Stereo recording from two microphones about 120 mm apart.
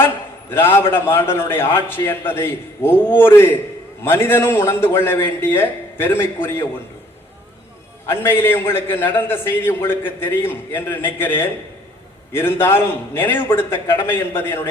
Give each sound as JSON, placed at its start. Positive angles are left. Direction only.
{"t": 0.5, "sound": "a man's voice", "side_deg": 20}
{"t": 8.0, "sound": "a man's voice", "side_deg": 20}